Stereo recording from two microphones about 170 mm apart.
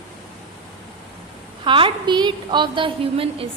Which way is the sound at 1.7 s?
30° right (ahead or behind).